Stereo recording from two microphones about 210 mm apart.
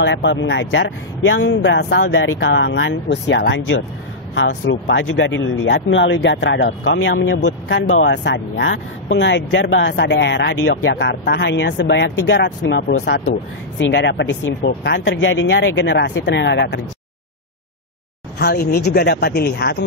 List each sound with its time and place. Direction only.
0.0 s speech: 60° left (ahead or behind)
14.6 s speech: 40° left (ahead or behind)
14.9 s speech: 60° left (ahead or behind)
18.4 s speech: 50° left (ahead or behind)